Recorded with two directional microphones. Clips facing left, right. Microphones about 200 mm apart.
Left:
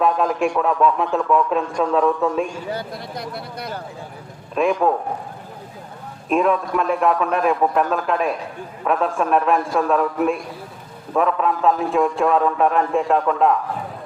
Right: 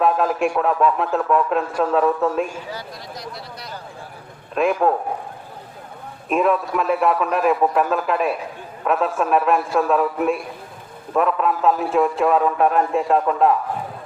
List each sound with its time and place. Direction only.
0.0 s a man's voice: 5° right (ahead or behind)
2.7 s speech: 55° left (ahead or behind)
4.5 s a man's voice: 5° right (ahead or behind)
6.2 s a man's voice: centre (ahead or behind)